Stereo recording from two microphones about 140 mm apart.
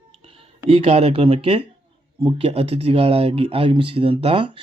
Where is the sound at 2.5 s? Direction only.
45° right (ahead or behind).